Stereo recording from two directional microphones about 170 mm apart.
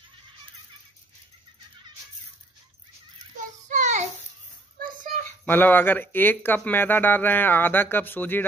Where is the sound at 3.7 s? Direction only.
45° right (ahead or behind).